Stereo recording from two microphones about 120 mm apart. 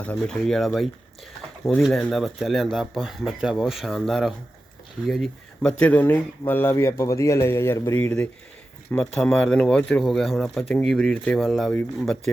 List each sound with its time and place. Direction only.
0.0 s speech: 10° left (ahead or behind)
5.8 s a man's voice: 15° left (ahead or behind)